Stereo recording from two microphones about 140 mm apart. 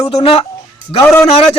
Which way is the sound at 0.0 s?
45° left (ahead or behind).